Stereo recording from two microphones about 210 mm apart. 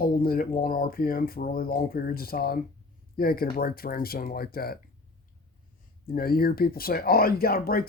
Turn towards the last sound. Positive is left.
turn(degrees=45)  # may be behind; listen again after turning